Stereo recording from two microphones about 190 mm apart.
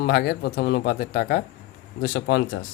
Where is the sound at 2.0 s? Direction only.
75° left (ahead or behind).